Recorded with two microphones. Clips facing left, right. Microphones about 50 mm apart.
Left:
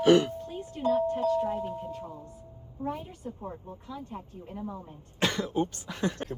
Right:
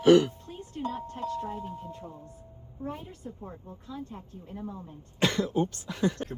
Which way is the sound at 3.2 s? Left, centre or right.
Left.